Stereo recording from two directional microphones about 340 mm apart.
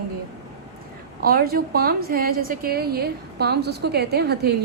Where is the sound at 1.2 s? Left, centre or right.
Right.